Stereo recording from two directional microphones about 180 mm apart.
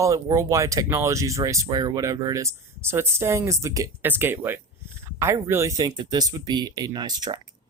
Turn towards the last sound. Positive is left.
turn(degrees=-20)  # may be behind; listen again after turning